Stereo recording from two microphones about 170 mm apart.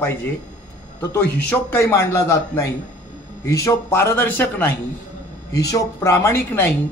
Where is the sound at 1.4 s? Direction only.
15° left (ahead or behind).